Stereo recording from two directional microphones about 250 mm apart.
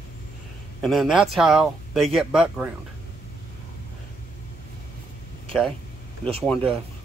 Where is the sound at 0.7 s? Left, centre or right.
Centre.